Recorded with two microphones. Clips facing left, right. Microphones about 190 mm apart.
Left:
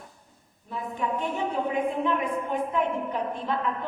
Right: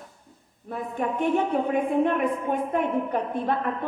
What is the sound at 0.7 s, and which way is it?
A woman's voice, 55° right (ahead or behind).